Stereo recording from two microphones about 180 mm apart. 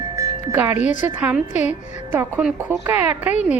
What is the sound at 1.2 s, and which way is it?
A woman's voice, 10° right (ahead or behind).